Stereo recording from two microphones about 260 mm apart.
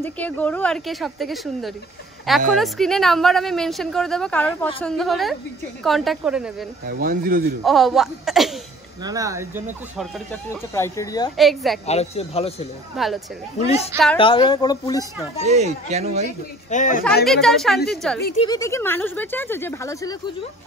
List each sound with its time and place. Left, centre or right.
0.0 s a woman's voice: centre
6.9 s speech: right
7.6 s a woman's voice: centre
9.0 s speech: centre
9.9 s speech: centre
11.3 s a woman's voice: centre
11.8 s speech: left
12.9 s a woman's voice: centre
13.6 s speech: left
15.4 s speech: right
16.3 s speech: left
17.0 s a woman's voice: centre
18.4 s speech: centre